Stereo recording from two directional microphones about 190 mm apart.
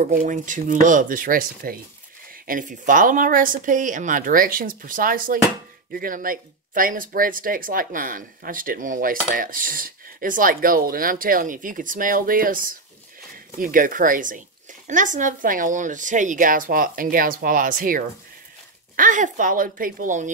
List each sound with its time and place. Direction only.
0.0 s speech: 45° right (ahead or behind)